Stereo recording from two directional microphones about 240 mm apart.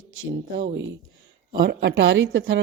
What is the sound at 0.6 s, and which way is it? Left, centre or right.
A woman's voice, right.